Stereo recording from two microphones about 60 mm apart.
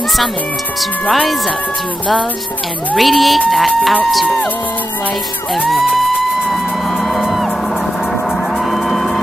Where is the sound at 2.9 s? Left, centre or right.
Centre.